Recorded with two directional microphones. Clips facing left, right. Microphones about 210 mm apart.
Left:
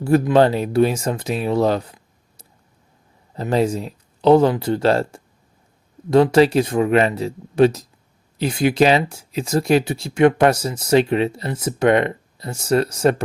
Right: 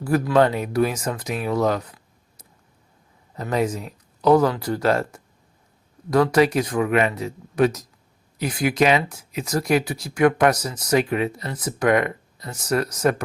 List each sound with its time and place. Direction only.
0.0 s speech: 25° left (ahead or behind)
3.3 s speech: 30° left (ahead or behind)